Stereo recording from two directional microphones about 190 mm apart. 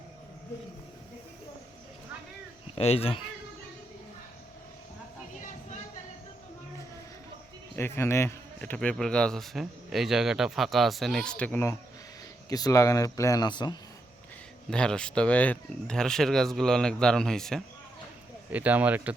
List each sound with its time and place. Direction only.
2.7 s speech: 30° left (ahead or behind)
7.8 s a man's voice: 10° left (ahead or behind)
14.7 s speech: 5° left (ahead or behind)
18.5 s speech: 10° right (ahead or behind)